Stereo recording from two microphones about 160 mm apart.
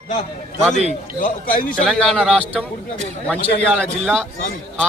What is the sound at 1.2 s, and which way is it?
Speech, 60° left (ahead or behind).